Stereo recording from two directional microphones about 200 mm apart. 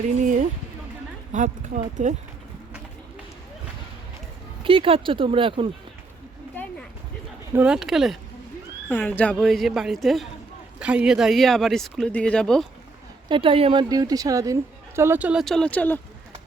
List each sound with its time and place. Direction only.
0.2 s a sound: 40° right (ahead or behind)
1.3 s speech: 40° right (ahead or behind)
4.6 s speech: 25° right (ahead or behind)
7.5 s speech: 5° right (ahead or behind)
8.9 s speech: 10° left (ahead or behind)
13.2 s a woman's voice: 25° right (ahead or behind); by 16.0 s 5° left (ahead or behind)